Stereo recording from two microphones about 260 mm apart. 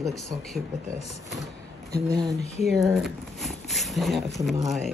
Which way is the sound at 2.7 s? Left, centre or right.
Centre.